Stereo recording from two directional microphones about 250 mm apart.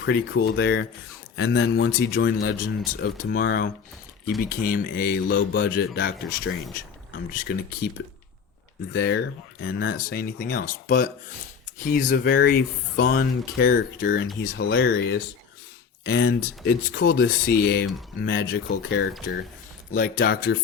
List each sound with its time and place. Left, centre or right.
0.0 s speech: left
7.5 s speech: left
8.9 s speech: left